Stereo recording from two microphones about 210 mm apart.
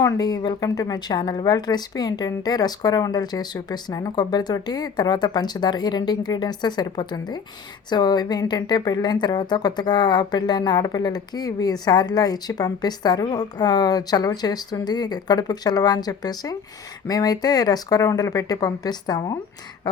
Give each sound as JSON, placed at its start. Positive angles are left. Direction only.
{"t": 0.0, "sound": "a woman's voice", "side_deg": 20}